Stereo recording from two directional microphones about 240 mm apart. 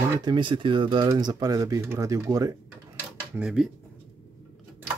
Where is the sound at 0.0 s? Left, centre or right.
Centre.